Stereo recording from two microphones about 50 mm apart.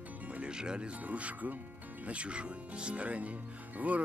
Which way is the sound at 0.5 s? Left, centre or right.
Centre.